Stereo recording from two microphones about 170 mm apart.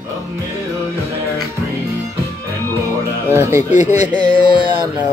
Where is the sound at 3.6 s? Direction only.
45° left (ahead or behind).